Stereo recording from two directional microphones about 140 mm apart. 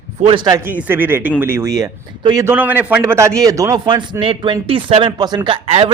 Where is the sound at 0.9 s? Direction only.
15° right (ahead or behind).